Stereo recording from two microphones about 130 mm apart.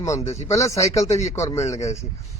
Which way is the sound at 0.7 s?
55° left (ahead or behind).